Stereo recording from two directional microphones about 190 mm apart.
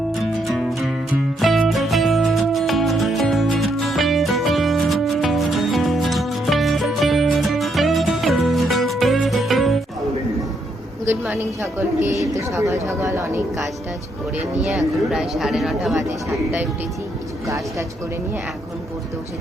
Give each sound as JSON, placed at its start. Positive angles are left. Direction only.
{"t": 0.1, "sound": "music", "side_deg": 0}
{"t": 11.3, "sound": "speech", "side_deg": -10}
{"t": 14.3, "sound": "speech", "side_deg": 0}